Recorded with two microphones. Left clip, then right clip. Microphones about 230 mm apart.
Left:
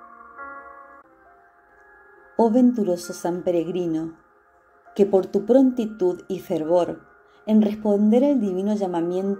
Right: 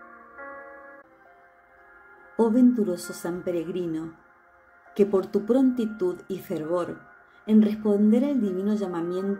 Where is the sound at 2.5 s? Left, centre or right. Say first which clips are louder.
Left 3 dB; centre.